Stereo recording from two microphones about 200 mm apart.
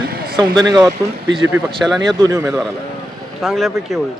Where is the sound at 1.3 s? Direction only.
Centre (ahead or behind).